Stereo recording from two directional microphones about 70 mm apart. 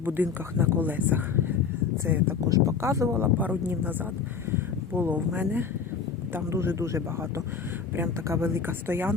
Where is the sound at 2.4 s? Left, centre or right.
Right.